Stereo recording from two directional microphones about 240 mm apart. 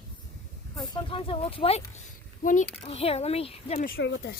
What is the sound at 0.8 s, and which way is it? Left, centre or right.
A child's voice, left.